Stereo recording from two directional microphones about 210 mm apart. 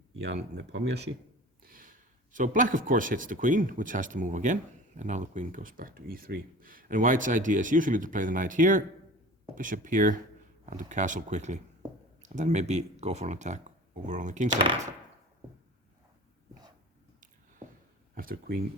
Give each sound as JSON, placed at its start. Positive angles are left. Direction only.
{"t": 0.3, "sound": "speech", "side_deg": -55}
{"t": 1.6, "sound": "speech", "side_deg": -40}
{"t": 14.5, "sound": "speech", "side_deg": -25}
{"t": 18.1, "sound": "speech", "side_deg": -45}